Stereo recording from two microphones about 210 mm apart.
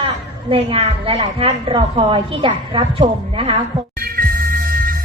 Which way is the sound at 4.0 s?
45° right (ahead or behind).